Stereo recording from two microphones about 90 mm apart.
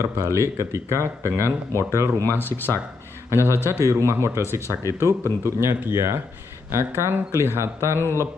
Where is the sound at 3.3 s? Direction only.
30° right (ahead or behind).